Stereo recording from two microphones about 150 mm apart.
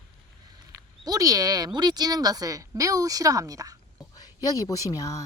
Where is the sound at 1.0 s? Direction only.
25° right (ahead or behind).